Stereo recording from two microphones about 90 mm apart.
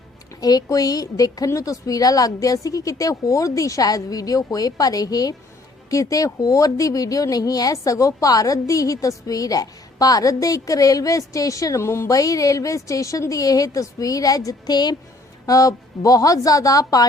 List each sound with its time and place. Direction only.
0.3 s a woman's voice: 45° left (ahead or behind)
15.4 s a woman's voice: 40° left (ahead or behind)